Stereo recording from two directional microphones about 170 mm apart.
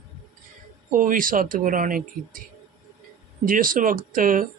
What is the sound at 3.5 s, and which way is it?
A man's voice, 55° right (ahead or behind).